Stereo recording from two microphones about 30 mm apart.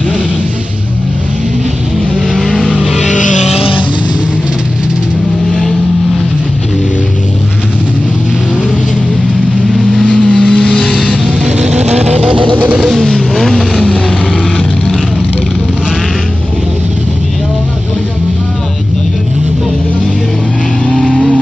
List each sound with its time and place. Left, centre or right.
10.0 s vehicle: left
13.0 s vehicle: left